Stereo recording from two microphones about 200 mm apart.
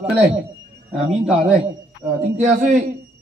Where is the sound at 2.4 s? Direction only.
35° right (ahead or behind).